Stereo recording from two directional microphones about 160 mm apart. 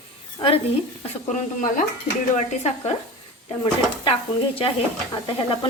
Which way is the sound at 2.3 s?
45° left (ahead or behind).